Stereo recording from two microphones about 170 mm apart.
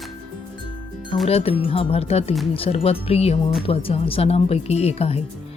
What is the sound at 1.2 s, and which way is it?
Speech, 35° left (ahead or behind).